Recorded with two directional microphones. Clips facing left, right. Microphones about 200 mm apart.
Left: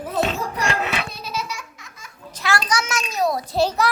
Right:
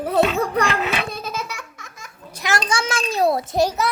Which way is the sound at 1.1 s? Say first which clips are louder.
Right 1 dB; 50° right (ahead or behind).